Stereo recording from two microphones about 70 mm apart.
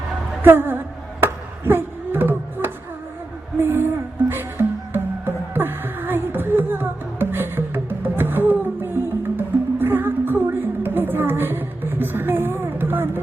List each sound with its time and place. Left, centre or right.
0.4 s a woman's voice: right
1.2 s a sound: right
3.6 s speech: right
4.3 s music: right